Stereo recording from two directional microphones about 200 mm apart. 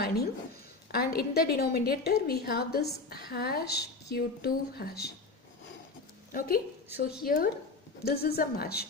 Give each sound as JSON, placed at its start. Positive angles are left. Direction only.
{"t": 0.9, "sound": "a woman's voice", "side_deg": 50}
{"t": 6.3, "sound": "a woman's voice", "side_deg": 50}